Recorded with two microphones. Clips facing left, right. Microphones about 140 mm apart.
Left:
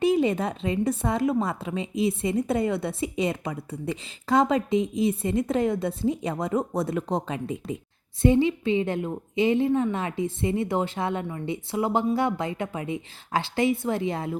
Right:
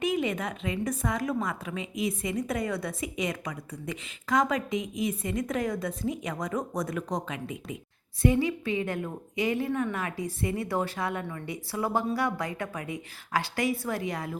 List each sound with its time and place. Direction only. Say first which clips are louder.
0.0 s speech: left 6 dB; 30° left (ahead or behind)